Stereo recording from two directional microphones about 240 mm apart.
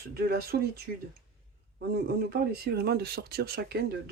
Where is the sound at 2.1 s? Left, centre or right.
Right.